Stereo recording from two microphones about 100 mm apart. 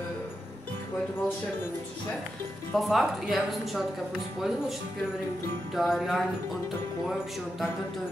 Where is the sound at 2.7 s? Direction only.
Centre (ahead or behind).